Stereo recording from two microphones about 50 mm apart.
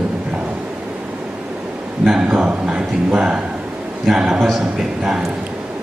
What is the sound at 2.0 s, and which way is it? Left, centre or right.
Speech, centre.